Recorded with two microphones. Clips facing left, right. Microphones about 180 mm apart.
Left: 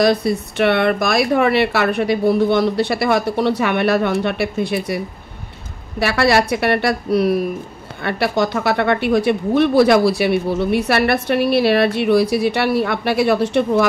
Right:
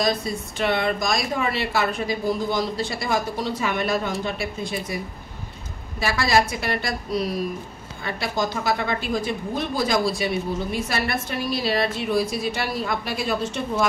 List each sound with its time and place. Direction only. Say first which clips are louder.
0.0 s speech: left 8 dB; 65° left (ahead or behind)